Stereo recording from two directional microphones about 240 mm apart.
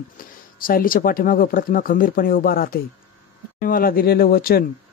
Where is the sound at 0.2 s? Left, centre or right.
Left.